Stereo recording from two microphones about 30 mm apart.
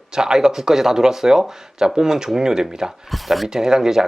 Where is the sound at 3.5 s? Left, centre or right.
Centre.